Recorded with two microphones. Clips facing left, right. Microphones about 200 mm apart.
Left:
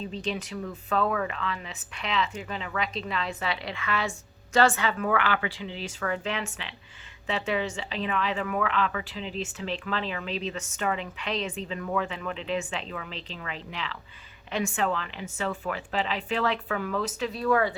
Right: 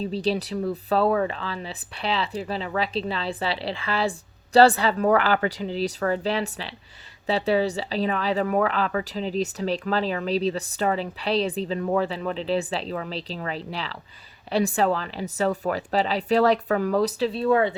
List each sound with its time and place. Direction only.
0.0 s speech: 35° right (ahead or behind)